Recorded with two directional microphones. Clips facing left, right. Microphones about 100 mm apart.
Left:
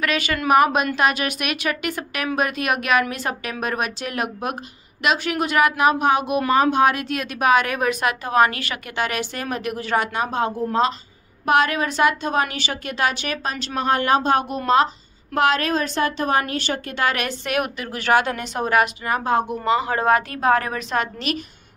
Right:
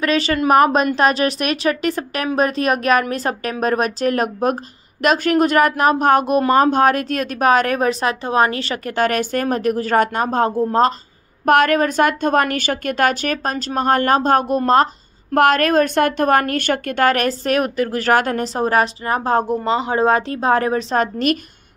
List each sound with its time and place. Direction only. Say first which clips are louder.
0.0 s a woman's voice: right 5 dB; 35° right (ahead or behind)
8.9 s a woman's voice: right 7 dB; 45° right (ahead or behind)